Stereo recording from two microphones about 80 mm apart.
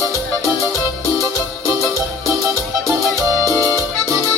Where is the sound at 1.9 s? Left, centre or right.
Right.